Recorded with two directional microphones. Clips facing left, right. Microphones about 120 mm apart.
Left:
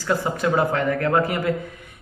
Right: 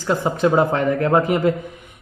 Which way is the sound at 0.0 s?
20° right (ahead or behind).